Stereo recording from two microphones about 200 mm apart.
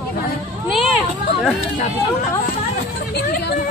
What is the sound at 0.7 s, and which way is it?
Speech, centre (ahead or behind).